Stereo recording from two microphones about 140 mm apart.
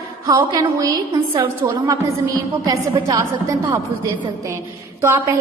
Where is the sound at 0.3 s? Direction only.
30° right (ahead or behind).